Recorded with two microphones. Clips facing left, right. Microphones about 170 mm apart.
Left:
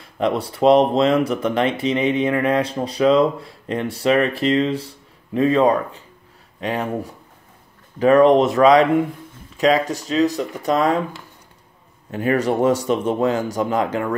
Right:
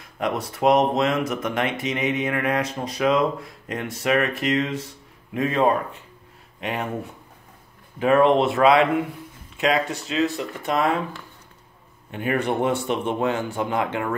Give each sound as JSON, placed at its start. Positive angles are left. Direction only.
{"t": 0.0, "sound": "speech", "side_deg": 30}
{"t": 12.1, "sound": "speech", "side_deg": 40}